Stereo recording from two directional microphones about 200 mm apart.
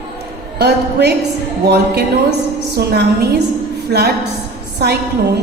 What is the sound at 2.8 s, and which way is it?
Speech, 50° right (ahead or behind).